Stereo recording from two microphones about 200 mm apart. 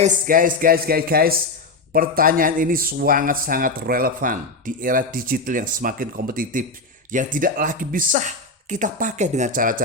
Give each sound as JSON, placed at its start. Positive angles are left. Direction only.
{"t": 0.0, "sound": "speech", "side_deg": -45}